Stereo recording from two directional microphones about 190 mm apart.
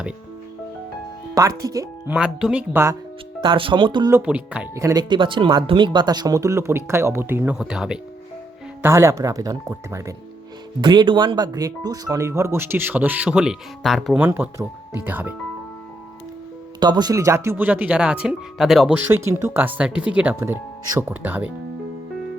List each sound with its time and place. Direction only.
1.4 s speech: 20° right (ahead or behind)
2.1 s speech: 5° right (ahead or behind)
3.4 s speech: 25° right (ahead or behind)
4.1 s speech: 5° right (ahead or behind)
8.8 s speech: 15° right (ahead or behind)
14.3 s speech: 10° right (ahead or behind)
16.8 s speech: 20° right (ahead or behind)